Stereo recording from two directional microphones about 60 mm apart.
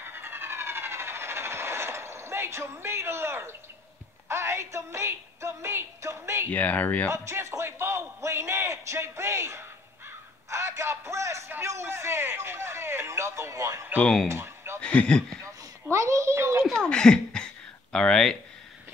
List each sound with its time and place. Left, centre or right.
0.0 s train: right
4.3 s a man's voice: right
6.5 s speech: left
7.4 s a man's voice: right
14.2 s a sound: right
14.8 s speech: centre
15.4 s a sound: right
16.7 s speech: centre